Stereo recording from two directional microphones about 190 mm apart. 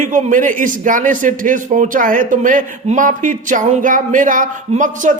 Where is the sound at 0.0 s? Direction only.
40° right (ahead or behind).